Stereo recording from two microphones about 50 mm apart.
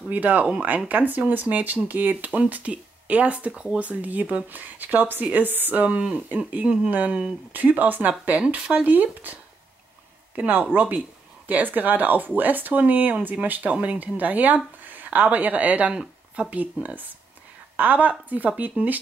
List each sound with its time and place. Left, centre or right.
0.1 s speech: right